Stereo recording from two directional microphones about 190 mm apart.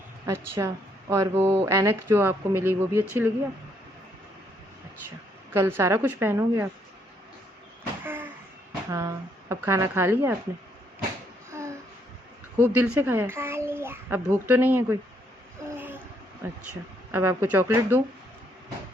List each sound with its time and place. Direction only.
0.3 s a child's voice: 15° right (ahead or behind)
5.5 s a child's voice: 10° right (ahead or behind)
8.0 s a sound: 10° right (ahead or behind)
8.9 s speech: 15° right (ahead or behind)
11.5 s a sound: 15° right (ahead or behind)
12.6 s a child's voice: 10° right (ahead or behind)
17.1 s a child's voice: 10° right (ahead or behind)